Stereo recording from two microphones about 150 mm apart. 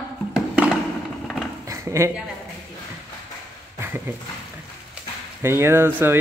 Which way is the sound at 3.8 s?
15° right (ahead or behind).